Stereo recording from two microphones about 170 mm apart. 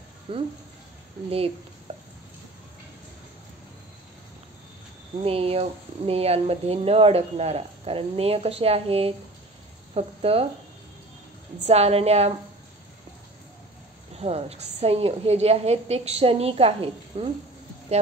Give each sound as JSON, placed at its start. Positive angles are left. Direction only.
{"t": 0.3, "sound": "speech", "side_deg": -30}
{"t": 5.2, "sound": "speech", "side_deg": -35}
{"t": 11.6, "sound": "speech", "side_deg": -40}
{"t": 14.2, "sound": "speech", "side_deg": -35}